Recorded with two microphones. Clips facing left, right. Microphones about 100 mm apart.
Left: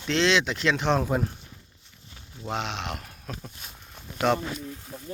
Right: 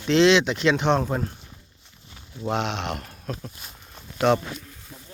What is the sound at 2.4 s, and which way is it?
Speech, centre (ahead or behind).